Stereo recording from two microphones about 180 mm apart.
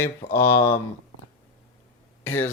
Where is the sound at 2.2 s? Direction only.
15° left (ahead or behind).